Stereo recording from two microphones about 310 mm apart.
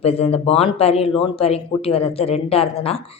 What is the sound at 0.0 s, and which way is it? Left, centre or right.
Speech, centre.